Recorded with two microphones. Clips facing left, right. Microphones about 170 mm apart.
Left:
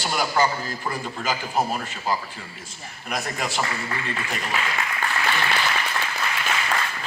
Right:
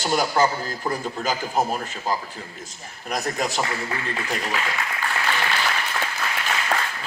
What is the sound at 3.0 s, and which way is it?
Speech, 40° right (ahead or behind).